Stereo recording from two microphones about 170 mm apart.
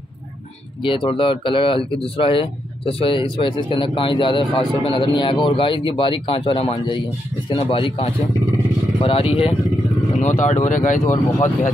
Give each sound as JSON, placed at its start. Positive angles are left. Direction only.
{"t": 0.8, "sound": "speech", "side_deg": 30}
{"t": 10.2, "sound": "speech", "side_deg": 45}